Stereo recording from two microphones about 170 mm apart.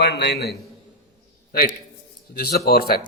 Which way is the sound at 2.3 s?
65° left (ahead or behind).